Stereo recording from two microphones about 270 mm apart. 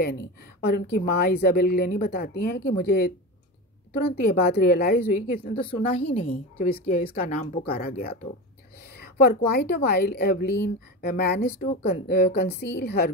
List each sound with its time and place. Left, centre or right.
0.0 s a woman's voice: left
4.1 s a woman's voice: left
5.5 s speech: centre
6.1 s a woman's voice: left